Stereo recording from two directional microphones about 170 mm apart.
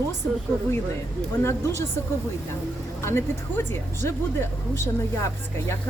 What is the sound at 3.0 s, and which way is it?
Speech, 15° left (ahead or behind).